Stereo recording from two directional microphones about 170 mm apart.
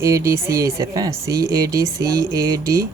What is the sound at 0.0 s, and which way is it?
Speech, 20° right (ahead or behind).